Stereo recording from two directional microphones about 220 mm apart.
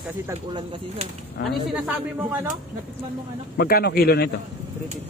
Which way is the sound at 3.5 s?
45° left (ahead or behind).